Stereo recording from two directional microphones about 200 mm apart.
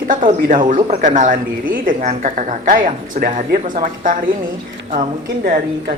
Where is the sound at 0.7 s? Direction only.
30° right (ahead or behind).